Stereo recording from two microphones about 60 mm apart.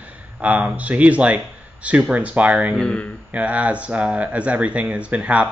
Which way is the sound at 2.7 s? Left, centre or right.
Centre.